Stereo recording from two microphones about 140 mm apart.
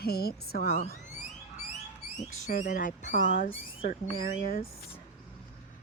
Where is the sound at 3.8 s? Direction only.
90° left.